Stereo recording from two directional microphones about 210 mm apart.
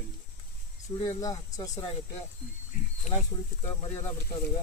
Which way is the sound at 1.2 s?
15° left (ahead or behind).